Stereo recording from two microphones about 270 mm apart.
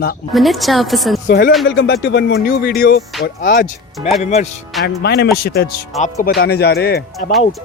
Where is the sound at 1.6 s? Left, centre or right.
Left.